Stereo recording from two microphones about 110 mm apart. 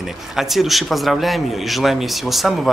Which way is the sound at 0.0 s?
5° right (ahead or behind).